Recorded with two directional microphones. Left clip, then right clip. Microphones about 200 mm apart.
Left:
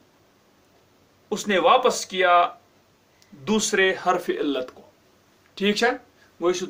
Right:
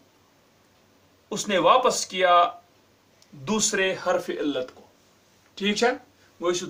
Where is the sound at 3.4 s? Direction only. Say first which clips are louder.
Left 3 dB; 25° left (ahead or behind).